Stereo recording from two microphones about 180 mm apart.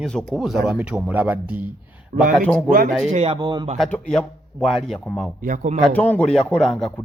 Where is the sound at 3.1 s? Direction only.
35° right (ahead or behind).